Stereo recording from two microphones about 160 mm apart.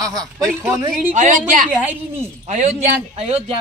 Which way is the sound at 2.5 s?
45° right (ahead or behind).